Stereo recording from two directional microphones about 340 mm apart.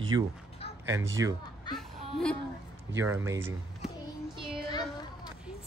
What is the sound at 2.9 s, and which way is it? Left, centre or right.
Speech, centre.